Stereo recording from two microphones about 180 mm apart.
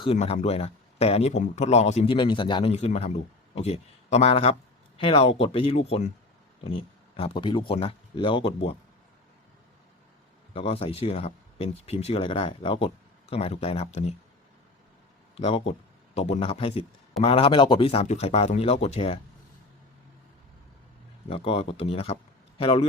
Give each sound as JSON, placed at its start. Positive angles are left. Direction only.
{"t": 0.0, "sound": "a man's voice", "side_deg": 35}
{"t": 7.2, "sound": "speech", "side_deg": 30}
{"t": 10.5, "sound": "speech", "side_deg": 30}
{"t": 15.4, "sound": "speech", "side_deg": 35}
{"t": 21.2, "sound": "a man's voice", "side_deg": 30}